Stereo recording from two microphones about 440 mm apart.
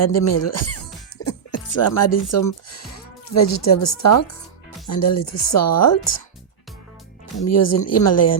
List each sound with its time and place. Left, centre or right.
0.0 s speech: left
7.4 s speech: left